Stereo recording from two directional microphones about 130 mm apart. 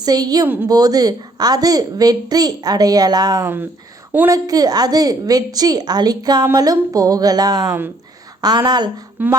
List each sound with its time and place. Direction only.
0.0 s a woman's voice: 30° right (ahead or behind)
0.4 s a woman's voice: 15° right (ahead or behind)
0.7 s a woman's voice: 30° right (ahead or behind)
9.2 s a woman's voice: 15° right (ahead or behind)